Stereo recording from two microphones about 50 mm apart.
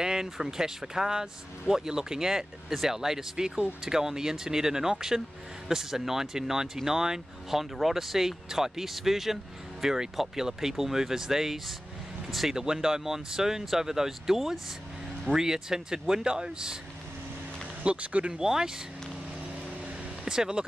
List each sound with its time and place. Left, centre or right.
0.0 s speech: centre
17.8 s speech: right
18.4 s speech: centre
20.2 s speech: centre